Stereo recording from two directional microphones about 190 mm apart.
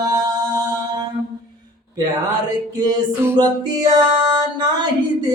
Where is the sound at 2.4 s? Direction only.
15° right (ahead or behind).